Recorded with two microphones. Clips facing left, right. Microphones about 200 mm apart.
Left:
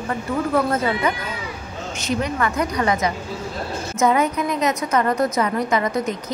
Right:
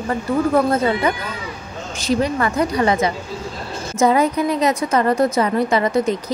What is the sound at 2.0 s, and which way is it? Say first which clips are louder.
A woman's voice: right 4 dB; 35° right (ahead or behind).